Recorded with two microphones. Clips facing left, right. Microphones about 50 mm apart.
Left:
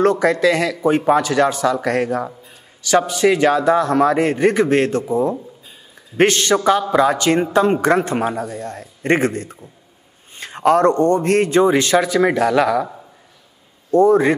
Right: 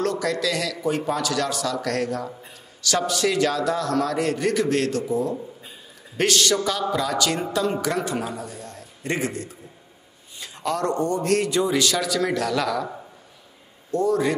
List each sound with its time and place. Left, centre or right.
0.0 s a man's voice: left
13.8 s a man's voice: left